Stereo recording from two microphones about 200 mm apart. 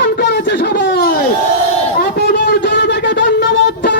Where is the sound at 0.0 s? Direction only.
60° left (ahead or behind).